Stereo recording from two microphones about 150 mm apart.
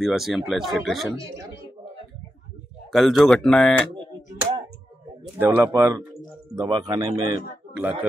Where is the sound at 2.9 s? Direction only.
Centre (ahead or behind).